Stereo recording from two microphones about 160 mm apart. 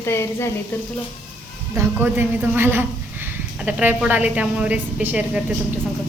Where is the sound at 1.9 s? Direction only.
15° right (ahead or behind).